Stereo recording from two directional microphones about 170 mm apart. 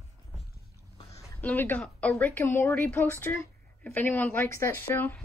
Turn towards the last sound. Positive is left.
turn(degrees=15)  # may be behind; listen again after turning